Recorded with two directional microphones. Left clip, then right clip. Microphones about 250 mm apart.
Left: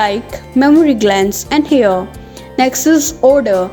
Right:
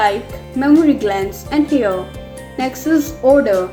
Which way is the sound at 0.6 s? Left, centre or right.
Left.